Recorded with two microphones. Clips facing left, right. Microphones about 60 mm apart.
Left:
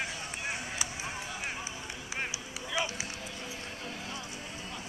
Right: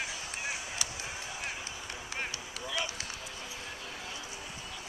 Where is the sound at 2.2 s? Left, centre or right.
Centre.